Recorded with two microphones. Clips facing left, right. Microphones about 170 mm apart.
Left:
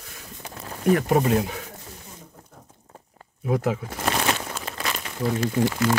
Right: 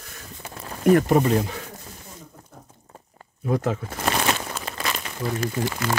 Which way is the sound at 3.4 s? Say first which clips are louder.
Even; 10° left (ahead or behind).